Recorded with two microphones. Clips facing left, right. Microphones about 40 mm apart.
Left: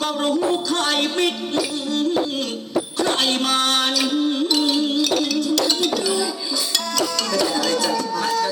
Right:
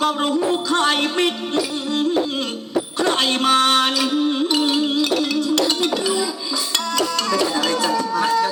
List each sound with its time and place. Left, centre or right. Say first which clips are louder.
0.0 s music: right 1 dB; right
3.0 s music: right 2 dB; right